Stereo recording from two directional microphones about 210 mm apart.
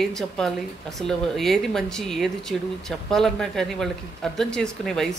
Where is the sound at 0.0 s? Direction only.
Centre (ahead or behind).